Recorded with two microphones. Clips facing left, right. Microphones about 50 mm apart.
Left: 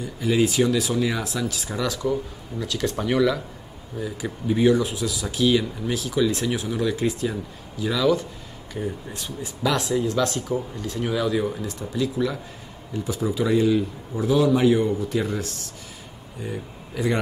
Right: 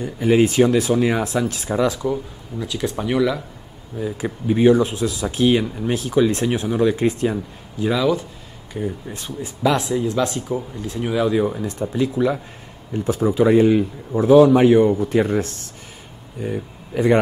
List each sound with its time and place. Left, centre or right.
0.0 s speech: right; by 3.4 s centre
4.0 s speech: right
8.0 s speech: centre
9.1 s speech: right
9.6 s speech: centre; by 15.6 s right
16.4 s speech: right